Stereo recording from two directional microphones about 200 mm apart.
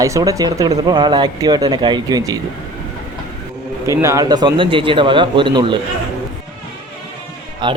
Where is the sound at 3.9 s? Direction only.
15° right (ahead or behind).